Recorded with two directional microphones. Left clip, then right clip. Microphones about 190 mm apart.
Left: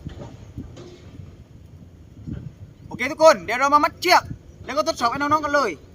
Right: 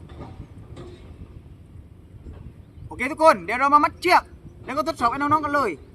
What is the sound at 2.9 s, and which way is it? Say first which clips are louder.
Speech: left 2 dB; centre (ahead or behind).